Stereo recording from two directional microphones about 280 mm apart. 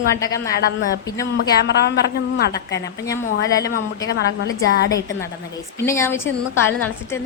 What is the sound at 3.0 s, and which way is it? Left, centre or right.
Speech, centre.